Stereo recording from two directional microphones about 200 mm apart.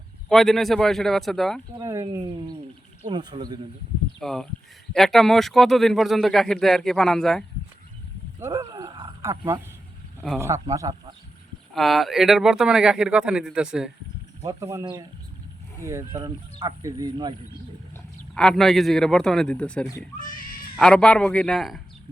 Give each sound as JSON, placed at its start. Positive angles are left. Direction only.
{"t": 0.3, "sound": "speech", "side_deg": 0}
{"t": 1.8, "sound": "speech", "side_deg": -15}
{"t": 4.2, "sound": "speech", "side_deg": 0}
{"t": 8.4, "sound": "a sound", "side_deg": -15}
{"t": 9.2, "sound": "speech", "side_deg": -15}
{"t": 11.7, "sound": "speech", "side_deg": 0}
{"t": 14.4, "sound": "speech", "side_deg": -15}
{"t": 17.9, "sound": "speech", "side_deg": 5}